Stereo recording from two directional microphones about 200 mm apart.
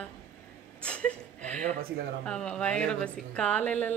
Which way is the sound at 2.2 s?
5° left (ahead or behind).